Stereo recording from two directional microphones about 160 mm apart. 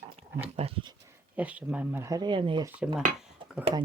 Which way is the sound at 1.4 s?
10° right (ahead or behind).